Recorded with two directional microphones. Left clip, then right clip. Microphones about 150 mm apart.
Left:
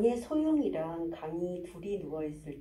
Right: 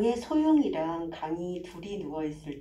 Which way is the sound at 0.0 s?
20° left (ahead or behind).